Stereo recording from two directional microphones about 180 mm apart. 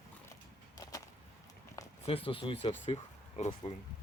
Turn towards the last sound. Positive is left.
turn(degrees=35)  # may be behind; listen again after turning